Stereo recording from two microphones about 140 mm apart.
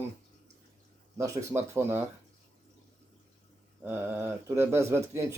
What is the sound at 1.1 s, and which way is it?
Speech, 25° right (ahead or behind).